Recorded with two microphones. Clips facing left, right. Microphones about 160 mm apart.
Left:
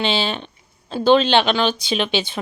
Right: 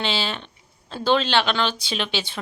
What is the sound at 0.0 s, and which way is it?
Speech, 20° left (ahead or behind).